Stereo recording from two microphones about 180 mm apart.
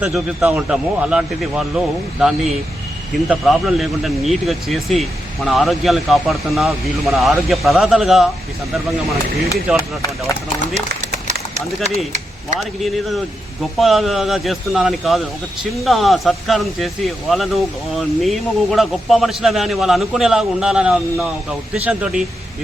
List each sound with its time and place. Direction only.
0.0 s speech: 5° right (ahead or behind)
9.7 s speech: 20° left (ahead or behind)
12.5 s speech: centre (ahead or behind)